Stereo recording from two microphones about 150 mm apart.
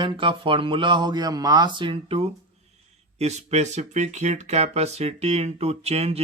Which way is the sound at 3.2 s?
45° right (ahead or behind).